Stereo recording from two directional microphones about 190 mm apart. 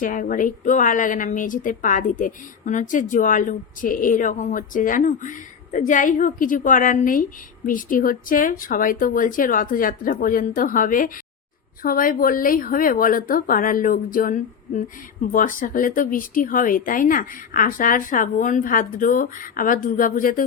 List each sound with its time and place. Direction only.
0.0 s a woman's voice: 45° left (ahead or behind)